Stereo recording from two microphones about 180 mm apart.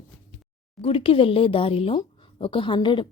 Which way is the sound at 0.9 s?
30° left (ahead or behind).